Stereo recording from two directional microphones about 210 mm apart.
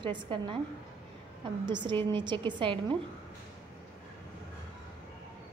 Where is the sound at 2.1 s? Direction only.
20° right (ahead or behind).